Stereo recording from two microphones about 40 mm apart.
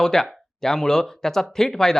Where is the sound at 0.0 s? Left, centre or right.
Centre.